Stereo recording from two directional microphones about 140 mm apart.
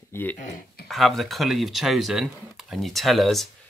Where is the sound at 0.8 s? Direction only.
Centre (ahead or behind).